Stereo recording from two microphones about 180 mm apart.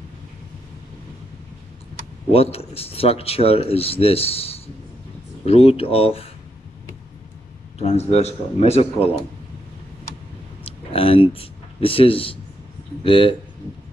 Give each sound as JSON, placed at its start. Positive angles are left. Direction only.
{"t": 2.3, "sound": "speech", "side_deg": 35}
{"t": 7.8, "sound": "speech", "side_deg": 35}
{"t": 10.6, "sound": "a sound", "side_deg": 30}
{"t": 13.0, "sound": "speech", "side_deg": 30}